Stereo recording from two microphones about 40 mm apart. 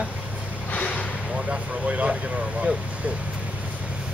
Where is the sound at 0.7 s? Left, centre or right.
Left.